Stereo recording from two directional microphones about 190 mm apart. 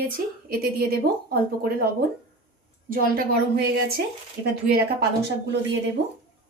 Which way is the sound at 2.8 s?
50° right (ahead or behind).